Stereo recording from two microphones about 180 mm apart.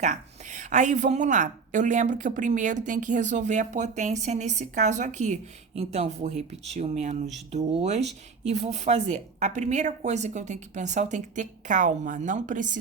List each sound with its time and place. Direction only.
0.0 s a woman's voice: 40° right (ahead or behind)